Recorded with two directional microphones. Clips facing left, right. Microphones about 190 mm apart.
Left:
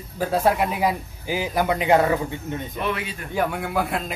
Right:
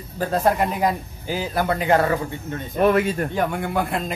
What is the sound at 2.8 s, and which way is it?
Speech, 45° right (ahead or behind).